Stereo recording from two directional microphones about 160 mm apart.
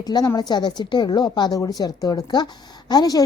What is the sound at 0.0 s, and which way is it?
Speech, 25° left (ahead or behind).